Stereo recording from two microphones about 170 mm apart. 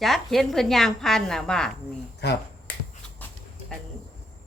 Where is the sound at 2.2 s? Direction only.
75° left (ahead or behind).